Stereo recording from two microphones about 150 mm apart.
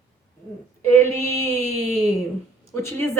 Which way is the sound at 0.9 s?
15° left (ahead or behind).